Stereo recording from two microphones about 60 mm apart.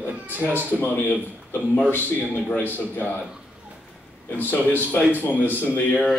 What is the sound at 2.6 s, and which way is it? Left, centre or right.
Speech, left.